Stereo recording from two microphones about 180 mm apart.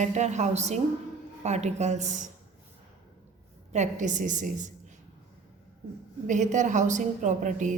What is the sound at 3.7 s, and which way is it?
A woman's voice, 40° right (ahead or behind).